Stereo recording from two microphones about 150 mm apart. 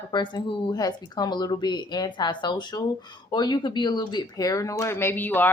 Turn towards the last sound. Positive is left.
turn(degrees=10)  # may be behind; listen again after turning